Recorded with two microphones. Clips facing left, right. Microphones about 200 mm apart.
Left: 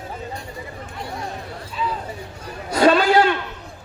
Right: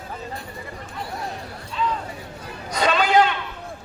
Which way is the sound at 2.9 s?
40° left (ahead or behind).